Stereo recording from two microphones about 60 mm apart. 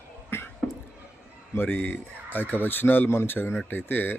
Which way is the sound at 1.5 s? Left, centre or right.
Left.